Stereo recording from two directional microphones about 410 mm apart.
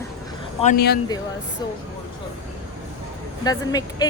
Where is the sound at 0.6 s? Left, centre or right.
Centre.